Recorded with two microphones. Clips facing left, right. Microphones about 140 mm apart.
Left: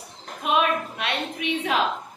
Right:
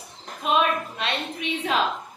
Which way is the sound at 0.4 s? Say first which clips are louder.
Even; 10° left (ahead or behind).